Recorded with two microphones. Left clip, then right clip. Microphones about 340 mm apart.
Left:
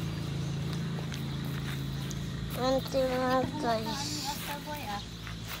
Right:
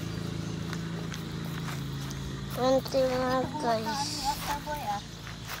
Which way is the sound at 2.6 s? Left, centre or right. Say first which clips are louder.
Right 3 dB; centre.